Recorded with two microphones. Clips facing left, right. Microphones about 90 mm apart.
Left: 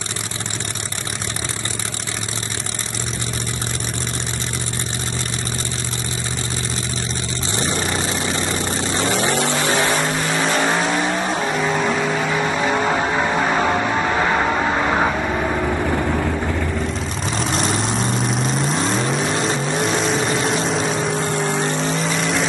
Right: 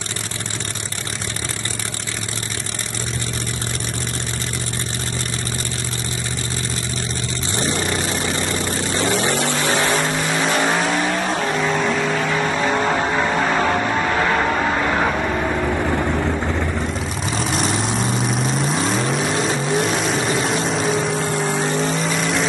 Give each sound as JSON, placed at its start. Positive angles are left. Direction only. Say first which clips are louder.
{"t": 9.2, "sound": "vehicle", "louder": "left 1 dB", "side_deg": 20}
{"t": 9.9, "sound": "vehicle", "louder": "even", "side_deg": 0}
{"t": 17.3, "sound": "vehicle", "louder": "even", "side_deg": 0}